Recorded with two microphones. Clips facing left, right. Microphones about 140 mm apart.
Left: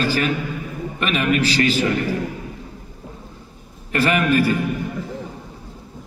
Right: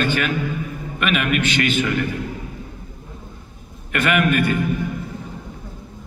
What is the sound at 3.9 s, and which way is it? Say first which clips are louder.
Speech: left 1 dB; 35° left (ahead or behind).